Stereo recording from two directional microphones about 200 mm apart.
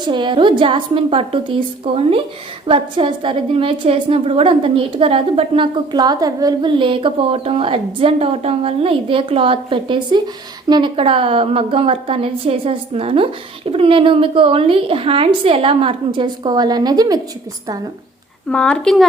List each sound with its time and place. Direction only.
0.1 s a woman's voice: 25° right (ahead or behind)
18.4 s speech: 5° left (ahead or behind)